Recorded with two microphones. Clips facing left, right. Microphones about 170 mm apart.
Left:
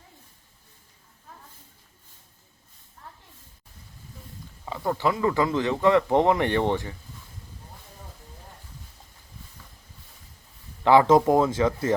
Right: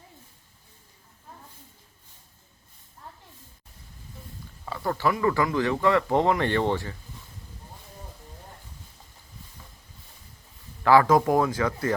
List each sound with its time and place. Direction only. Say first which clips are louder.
4.6 s speech: left 1 dB; 15° left (ahead or behind)
10.8 s speech: left 2 dB; 20° left (ahead or behind)